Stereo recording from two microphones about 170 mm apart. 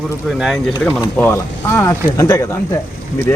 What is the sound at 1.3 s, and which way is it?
Speech, 15° left (ahead or behind).